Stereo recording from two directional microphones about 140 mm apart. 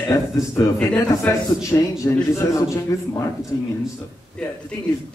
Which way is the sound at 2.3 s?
20° left (ahead or behind).